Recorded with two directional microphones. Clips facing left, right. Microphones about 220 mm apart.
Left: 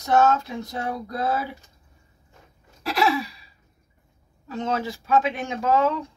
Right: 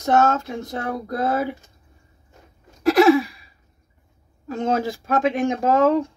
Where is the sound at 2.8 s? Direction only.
50° right (ahead or behind).